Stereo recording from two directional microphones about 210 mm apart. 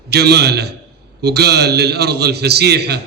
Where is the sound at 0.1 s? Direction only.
50° right (ahead or behind).